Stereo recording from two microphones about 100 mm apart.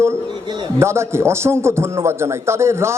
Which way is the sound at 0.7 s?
25° right (ahead or behind).